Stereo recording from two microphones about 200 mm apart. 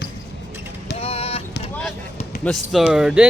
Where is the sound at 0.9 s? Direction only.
30° left (ahead or behind).